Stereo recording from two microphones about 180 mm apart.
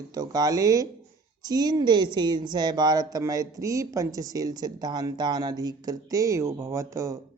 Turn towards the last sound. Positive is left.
turn(degrees=-15)  # may be behind; listen again after turning